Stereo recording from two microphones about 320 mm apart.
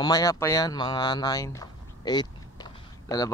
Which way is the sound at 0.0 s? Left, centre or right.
Centre.